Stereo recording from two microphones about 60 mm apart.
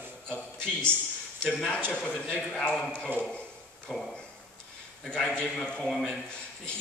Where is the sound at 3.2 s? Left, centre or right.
Centre.